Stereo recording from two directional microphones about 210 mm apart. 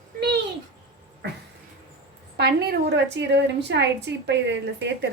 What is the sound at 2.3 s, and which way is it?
A woman's voice, 50° right (ahead or behind).